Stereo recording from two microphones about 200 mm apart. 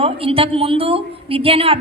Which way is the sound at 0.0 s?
30° right (ahead or behind).